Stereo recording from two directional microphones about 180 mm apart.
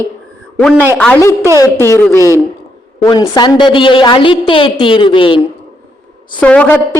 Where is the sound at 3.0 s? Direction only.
20° left (ahead or behind).